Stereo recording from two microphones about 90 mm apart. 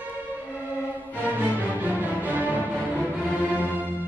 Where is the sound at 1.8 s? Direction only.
20° right (ahead or behind).